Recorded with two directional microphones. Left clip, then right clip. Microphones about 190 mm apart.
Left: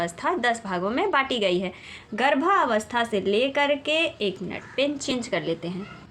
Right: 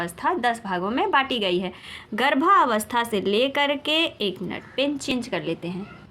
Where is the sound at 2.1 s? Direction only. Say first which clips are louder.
Right 3 dB; 25° right (ahead or behind).